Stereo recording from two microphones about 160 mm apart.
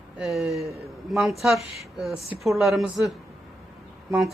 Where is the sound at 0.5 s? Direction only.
20° right (ahead or behind).